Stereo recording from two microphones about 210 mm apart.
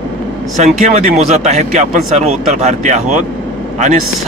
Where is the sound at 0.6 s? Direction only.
35° right (ahead or behind).